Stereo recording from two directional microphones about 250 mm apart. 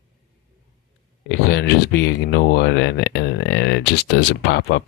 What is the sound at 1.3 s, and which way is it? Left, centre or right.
Speech, left.